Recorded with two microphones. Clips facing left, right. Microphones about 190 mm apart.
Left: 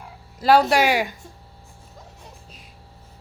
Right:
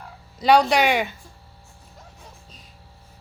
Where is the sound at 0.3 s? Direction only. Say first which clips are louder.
Left 1 dB; 5° left (ahead or behind).